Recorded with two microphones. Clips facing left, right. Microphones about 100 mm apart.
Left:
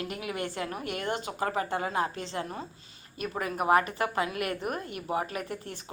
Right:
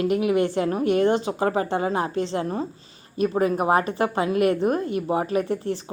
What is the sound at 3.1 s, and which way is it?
Speech, 25° right (ahead or behind).